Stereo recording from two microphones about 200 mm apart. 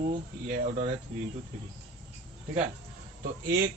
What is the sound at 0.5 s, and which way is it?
Speech, 35° right (ahead or behind).